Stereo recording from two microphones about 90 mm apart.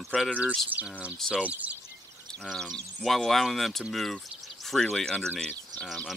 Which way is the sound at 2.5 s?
Centre (ahead or behind).